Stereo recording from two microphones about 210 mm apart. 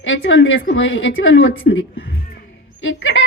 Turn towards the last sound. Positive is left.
turn(degrees=65)  # may be behind; listen again after turning